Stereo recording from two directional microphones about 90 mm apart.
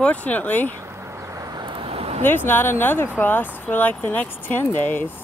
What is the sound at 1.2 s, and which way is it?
Vehicle, 35° right (ahead or behind).